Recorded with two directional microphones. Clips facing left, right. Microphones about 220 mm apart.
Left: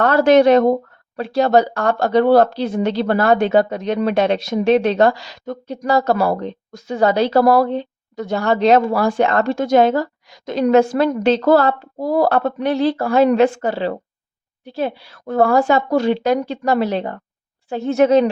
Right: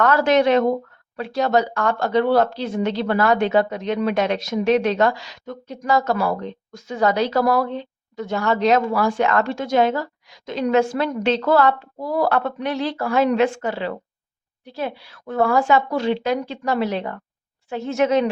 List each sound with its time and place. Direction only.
0.0 s speech: 30° left (ahead or behind)